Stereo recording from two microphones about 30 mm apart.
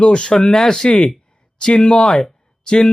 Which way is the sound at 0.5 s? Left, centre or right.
Centre.